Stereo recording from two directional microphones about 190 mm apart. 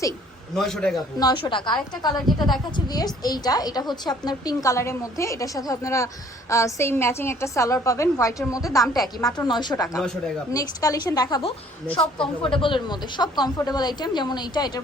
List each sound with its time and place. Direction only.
0.5 s a man's voice: centre (ahead or behind)
0.9 s a woman's voice: 20° left (ahead or behind)